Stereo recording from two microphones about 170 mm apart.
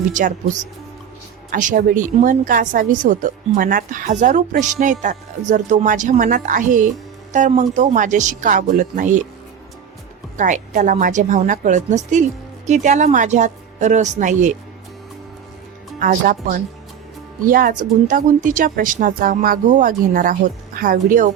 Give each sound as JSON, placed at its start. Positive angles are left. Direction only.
{"t": 0.1, "sound": "speech", "side_deg": -50}
{"t": 1.5, "sound": "speech", "side_deg": -50}
{"t": 10.3, "sound": "speech", "side_deg": -50}
{"t": 16.0, "sound": "speech", "side_deg": -55}